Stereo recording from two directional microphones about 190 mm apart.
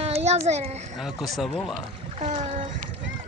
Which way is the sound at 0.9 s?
Centre (ahead or behind).